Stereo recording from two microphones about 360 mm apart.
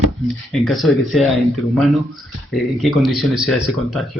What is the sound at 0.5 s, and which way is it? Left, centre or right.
Speech, centre.